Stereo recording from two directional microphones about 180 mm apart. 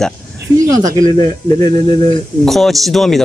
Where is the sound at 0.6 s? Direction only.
20° right (ahead or behind).